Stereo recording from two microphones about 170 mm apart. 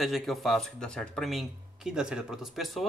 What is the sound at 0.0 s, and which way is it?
Speech, centre (ahead or behind).